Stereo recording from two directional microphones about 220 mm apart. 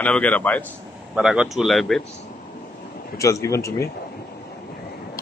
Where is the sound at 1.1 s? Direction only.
5° right (ahead or behind).